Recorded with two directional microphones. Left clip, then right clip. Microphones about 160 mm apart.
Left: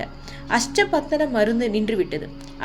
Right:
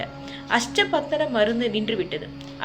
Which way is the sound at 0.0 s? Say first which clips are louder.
Right 1 dB; 45° left (ahead or behind).